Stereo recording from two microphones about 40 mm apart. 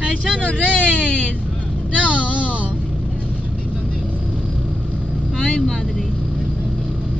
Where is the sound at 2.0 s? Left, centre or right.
Right.